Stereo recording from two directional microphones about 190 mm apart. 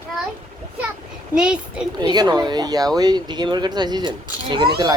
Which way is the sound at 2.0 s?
20° right (ahead or behind).